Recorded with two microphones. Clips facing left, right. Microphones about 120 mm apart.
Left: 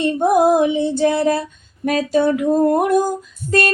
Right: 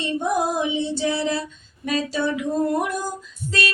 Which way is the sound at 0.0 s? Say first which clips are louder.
Left 8 dB; 55° left (ahead or behind).